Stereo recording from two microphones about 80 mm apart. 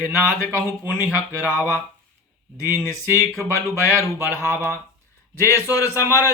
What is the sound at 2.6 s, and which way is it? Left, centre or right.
A man's voice, left.